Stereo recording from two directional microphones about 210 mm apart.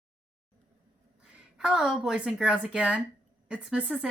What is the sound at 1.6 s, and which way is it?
A woman's voice, 5° right (ahead or behind).